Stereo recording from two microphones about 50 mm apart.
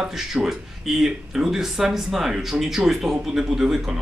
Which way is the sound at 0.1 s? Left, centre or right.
Centre.